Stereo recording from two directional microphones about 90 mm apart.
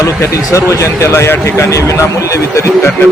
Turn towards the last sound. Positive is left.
turn(degrees=30)  # may be behind; listen again after turning